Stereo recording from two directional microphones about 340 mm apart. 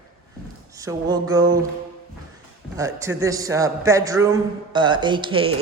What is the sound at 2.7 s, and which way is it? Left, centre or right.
Speech, centre.